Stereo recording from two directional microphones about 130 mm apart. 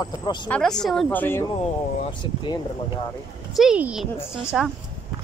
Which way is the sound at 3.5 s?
5° right (ahead or behind).